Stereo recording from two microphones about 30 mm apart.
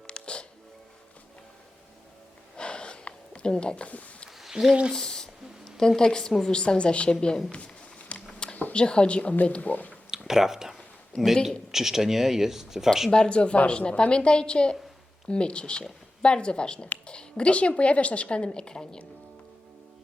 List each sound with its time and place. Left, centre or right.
0.1 s music: left
2.6 s a sound: left
3.8 s speech: left
4.6 s speech: right
4.9 s a sound: left
6.0 s a woman's voice: left
7.6 s a sound: left
8.7 s a woman's voice: left
9.2 s speech: left
10.1 s a sound: centre
11.7 s speech: centre
13.1 s a woman's voice: left